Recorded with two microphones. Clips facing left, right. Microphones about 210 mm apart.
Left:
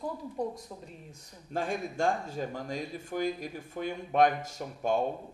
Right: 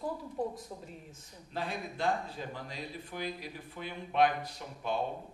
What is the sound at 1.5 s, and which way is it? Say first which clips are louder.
Speech: left 5 dB; 45° left (ahead or behind).